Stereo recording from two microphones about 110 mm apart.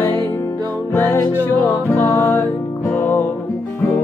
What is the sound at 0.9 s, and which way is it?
Music, 20° left (ahead or behind).